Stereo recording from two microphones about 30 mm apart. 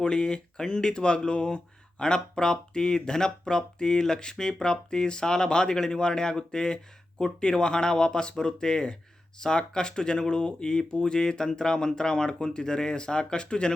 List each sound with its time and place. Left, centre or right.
0.0 s speech: left